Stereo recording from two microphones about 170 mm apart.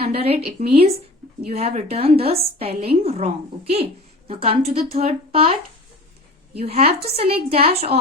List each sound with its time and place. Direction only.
0.2 s a woman's voice: 35° right (ahead or behind)
6.6 s a woman's voice: 35° right (ahead or behind)